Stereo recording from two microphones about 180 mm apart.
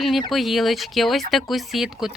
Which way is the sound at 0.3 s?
Centre (ahead or behind).